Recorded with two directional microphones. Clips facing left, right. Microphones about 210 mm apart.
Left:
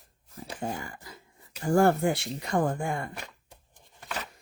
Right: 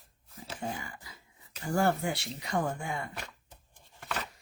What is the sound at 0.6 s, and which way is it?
Speech, 45° left (ahead or behind).